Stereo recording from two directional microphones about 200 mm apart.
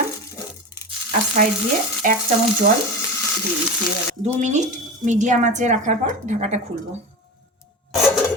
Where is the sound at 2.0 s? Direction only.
40° right (ahead or behind).